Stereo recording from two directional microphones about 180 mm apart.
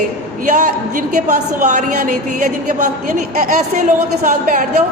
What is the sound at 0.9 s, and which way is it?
A woman's voice, 45° right (ahead or behind).